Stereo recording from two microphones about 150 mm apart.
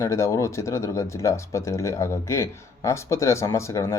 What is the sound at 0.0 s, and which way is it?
Speech, 20° left (ahead or behind).